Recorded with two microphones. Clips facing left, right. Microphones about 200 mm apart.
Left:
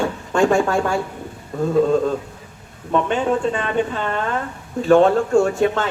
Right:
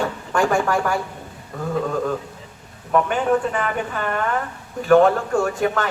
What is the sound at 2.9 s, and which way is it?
Speech, 25° left (ahead or behind).